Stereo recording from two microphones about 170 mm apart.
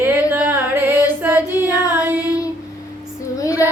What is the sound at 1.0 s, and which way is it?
Female singing, 10° right (ahead or behind).